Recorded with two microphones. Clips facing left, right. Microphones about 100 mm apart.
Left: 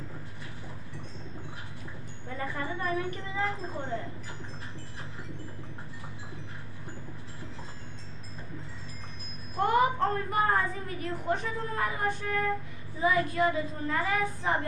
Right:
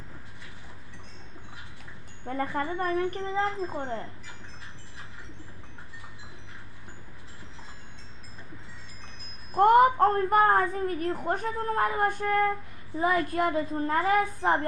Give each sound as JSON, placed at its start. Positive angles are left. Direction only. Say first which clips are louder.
{"t": 2.2, "sound": "child singing", "louder": "right 5 dB", "side_deg": -45}
{"t": 3.2, "sound": "speech", "louder": "right 4 dB", "side_deg": -30}
{"t": 9.6, "sound": "a woman's voice", "louder": "right 7 dB", "side_deg": -50}
{"t": 13.0, "sound": "child singing", "louder": "right 1 dB", "side_deg": -45}